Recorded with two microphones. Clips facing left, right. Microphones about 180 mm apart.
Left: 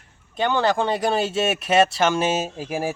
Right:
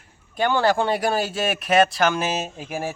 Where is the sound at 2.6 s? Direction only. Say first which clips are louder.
Left 3 dB; 5° left (ahead or behind).